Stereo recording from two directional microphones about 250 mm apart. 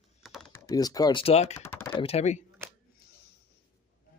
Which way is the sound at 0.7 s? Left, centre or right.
Centre.